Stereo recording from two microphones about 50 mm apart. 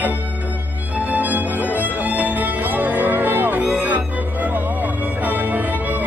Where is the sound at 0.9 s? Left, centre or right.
Right.